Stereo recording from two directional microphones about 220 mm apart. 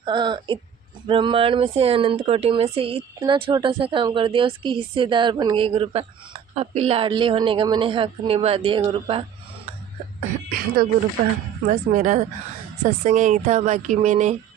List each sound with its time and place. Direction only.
0.0 s speech: 20° right (ahead or behind)
11.6 s speech: 35° right (ahead or behind)